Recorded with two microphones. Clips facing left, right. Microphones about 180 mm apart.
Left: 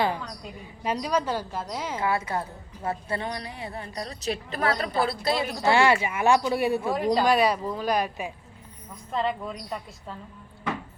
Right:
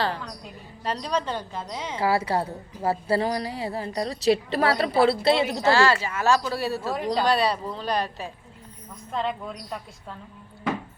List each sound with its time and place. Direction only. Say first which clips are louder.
0.9 s speech: left 1 dB; 10° left (ahead or behind)
2.0 s a woman's voice: right 5 dB; 30° right (ahead or behind)
5.6 s speech: left 1 dB; 20° left (ahead or behind)
6.9 s a woman's voice: even; centre (ahead or behind)